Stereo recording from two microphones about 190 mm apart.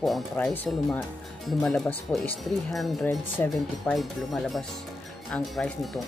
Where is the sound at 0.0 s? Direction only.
5° left (ahead or behind).